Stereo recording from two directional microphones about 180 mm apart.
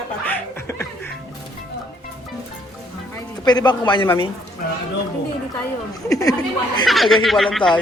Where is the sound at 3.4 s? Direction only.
25° left (ahead or behind).